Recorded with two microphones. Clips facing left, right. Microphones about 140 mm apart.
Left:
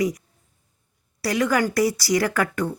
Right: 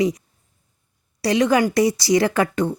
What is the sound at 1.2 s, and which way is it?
A woman's voice, 20° right (ahead or behind).